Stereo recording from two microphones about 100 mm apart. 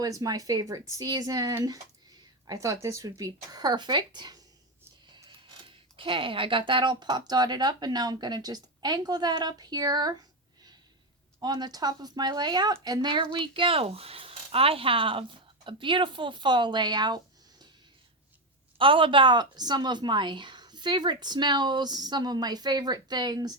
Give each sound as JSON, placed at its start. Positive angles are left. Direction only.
{"t": 0.0, "sound": "speech", "side_deg": -35}
{"t": 5.6, "sound": "a woman's voice", "side_deg": -60}
{"t": 11.3, "sound": "a woman's voice", "side_deg": -45}
{"t": 13.3, "sound": "a woman's voice", "side_deg": -55}
{"t": 18.8, "sound": "a woman's voice", "side_deg": -60}